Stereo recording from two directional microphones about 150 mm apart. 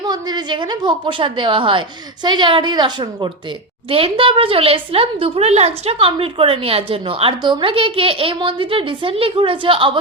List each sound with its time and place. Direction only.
0.0 s speech: 30° right (ahead or behind)